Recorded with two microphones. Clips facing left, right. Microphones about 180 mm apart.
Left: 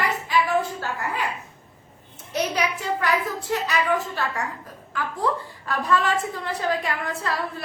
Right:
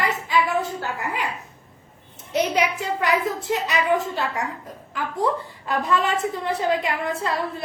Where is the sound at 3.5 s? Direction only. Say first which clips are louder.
Right 1 dB; 20° right (ahead or behind).